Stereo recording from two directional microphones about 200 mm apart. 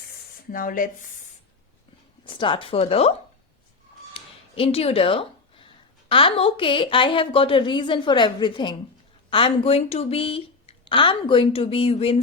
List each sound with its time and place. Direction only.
0.5 s speech: 45° left (ahead or behind)
2.2 s speech: 25° left (ahead or behind)
4.1 s a sound: 30° left (ahead or behind)
6.1 s speech: 25° left (ahead or behind)